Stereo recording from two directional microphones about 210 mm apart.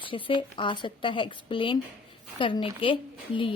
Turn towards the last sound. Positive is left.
turn(degrees=25)  # may be behind; listen again after turning